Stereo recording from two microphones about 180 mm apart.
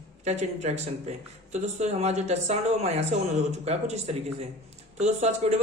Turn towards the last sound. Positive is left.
turn(degrees=-40)  # may be behind; listen again after turning